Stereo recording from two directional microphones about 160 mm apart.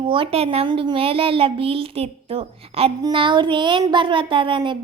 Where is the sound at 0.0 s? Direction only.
30° right (ahead or behind).